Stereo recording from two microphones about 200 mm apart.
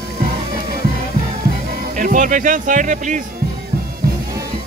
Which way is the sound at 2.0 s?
40° right (ahead or behind).